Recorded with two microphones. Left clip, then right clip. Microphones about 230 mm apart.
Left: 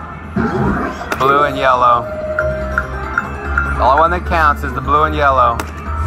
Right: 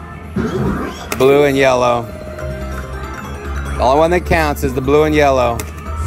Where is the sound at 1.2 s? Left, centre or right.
Right.